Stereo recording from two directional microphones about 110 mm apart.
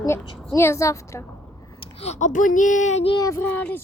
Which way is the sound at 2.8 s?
90° left.